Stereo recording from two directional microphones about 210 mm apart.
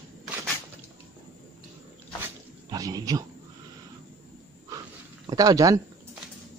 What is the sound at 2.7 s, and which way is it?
Speech, 15° right (ahead or behind).